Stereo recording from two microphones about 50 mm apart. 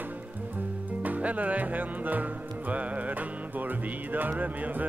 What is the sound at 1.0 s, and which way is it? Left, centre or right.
Music, right.